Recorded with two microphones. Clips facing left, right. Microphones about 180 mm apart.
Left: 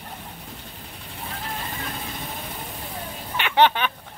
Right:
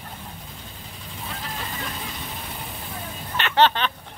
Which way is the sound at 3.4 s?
10° left (ahead or behind).